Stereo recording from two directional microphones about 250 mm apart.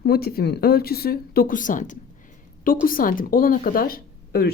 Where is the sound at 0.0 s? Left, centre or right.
Left.